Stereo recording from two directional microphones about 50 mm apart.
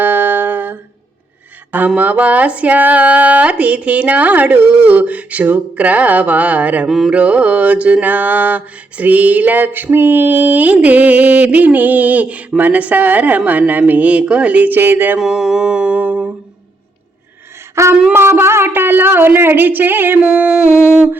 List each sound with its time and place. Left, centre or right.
0.0 s humming: right
2.0 s speech: right
6.8 s carnatic music: centre
7.1 s speech: right
8.0 s a sound: right
15.2 s speech: centre; by 16.3 s right
17.8 s a sound: right
18.1 s a woman's voice: right
20.2 s a sound: right
20.7 s humming: left